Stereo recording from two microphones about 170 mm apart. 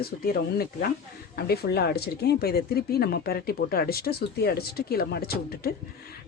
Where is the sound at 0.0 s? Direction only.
65° left (ahead or behind).